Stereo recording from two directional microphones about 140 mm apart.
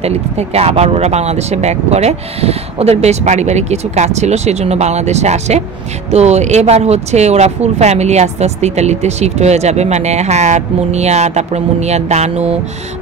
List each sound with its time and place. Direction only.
0.0 s speech: 50° right (ahead or behind)